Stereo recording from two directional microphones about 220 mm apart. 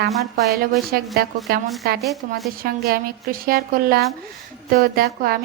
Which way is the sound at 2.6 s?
40° right (ahead or behind).